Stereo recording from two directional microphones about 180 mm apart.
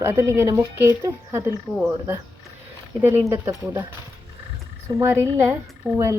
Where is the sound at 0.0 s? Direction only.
15° right (ahead or behind).